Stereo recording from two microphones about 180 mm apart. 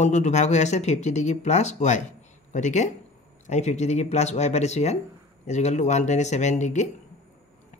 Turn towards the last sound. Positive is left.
turn(degrees=40)  # may be behind; listen again after turning